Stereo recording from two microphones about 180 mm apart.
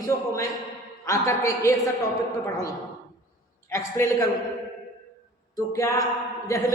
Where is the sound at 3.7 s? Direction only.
15° left (ahead or behind).